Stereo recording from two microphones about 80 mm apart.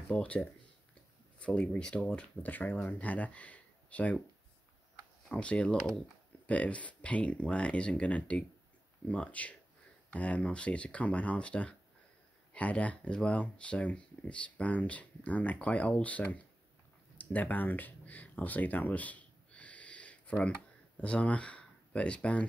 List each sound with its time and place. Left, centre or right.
0.1 s speech: centre
5.3 s speech: centre
17.2 s a sound: left
21.0 s speech: centre